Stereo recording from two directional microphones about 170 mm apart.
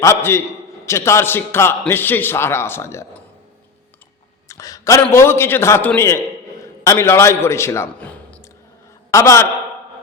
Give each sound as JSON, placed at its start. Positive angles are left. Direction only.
{"t": 0.0, "sound": "a man's voice", "side_deg": 15}
{"t": 4.4, "sound": "a man's voice", "side_deg": 20}